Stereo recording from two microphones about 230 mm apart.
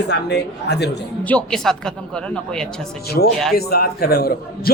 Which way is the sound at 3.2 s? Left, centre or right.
Left.